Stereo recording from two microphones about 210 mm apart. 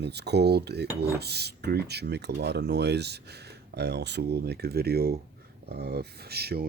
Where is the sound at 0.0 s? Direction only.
50° right (ahead or behind).